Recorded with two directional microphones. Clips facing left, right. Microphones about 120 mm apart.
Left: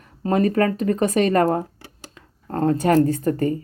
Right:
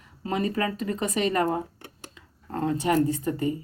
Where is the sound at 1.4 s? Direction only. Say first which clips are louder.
Left 6 dB; 90° left.